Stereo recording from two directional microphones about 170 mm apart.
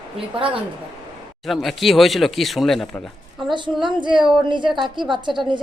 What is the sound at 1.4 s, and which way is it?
Speech, centre (ahead or behind).